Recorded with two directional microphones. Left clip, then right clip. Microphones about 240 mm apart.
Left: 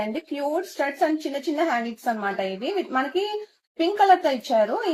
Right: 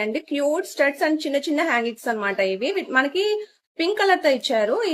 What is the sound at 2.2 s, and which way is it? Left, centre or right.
Speech, right.